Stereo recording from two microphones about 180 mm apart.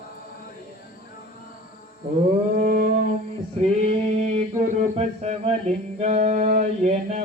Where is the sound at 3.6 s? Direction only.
40° right (ahead or behind).